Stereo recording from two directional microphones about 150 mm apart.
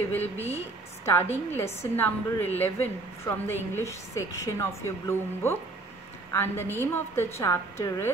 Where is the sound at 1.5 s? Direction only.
15° left (ahead or behind).